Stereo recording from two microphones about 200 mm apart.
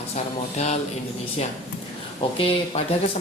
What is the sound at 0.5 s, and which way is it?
Speech, 35° left (ahead or behind).